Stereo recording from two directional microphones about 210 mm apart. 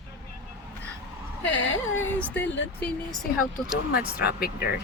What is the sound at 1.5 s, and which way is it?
Speech, 60° left (ahead or behind).